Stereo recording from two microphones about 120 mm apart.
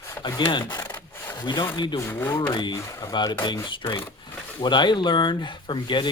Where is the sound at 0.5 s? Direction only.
35° left (ahead or behind).